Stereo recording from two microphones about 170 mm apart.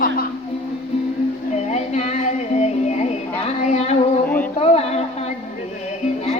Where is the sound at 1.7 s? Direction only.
40° left (ahead or behind).